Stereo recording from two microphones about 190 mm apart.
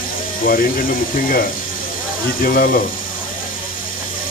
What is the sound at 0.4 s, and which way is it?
Speech, 50° left (ahead or behind).